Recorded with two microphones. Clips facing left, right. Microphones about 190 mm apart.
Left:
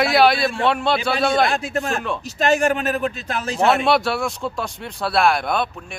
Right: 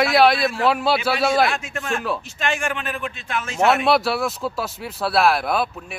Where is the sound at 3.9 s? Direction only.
Centre (ahead or behind).